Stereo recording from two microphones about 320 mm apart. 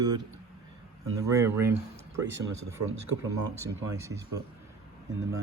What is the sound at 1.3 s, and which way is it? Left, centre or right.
Speech, centre.